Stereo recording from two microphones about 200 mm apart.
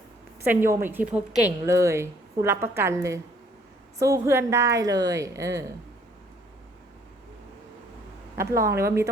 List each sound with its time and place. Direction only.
0.4 s a woman's voice: 10° right (ahead or behind)
8.6 s a woman's voice: 15° right (ahead or behind)